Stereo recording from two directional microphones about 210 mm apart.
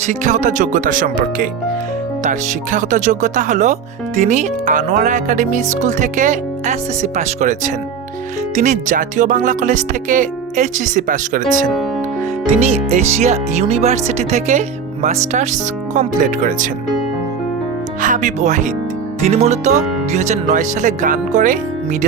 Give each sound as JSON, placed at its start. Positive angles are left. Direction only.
{"t": 0.0, "sound": "speech", "side_deg": -35}
{"t": 12.5, "sound": "speech", "side_deg": -30}
{"t": 18.0, "sound": "speech", "side_deg": -35}